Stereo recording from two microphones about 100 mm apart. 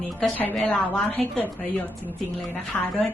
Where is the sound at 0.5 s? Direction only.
Centre (ahead or behind).